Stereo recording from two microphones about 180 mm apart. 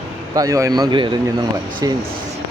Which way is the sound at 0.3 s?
20° right (ahead or behind).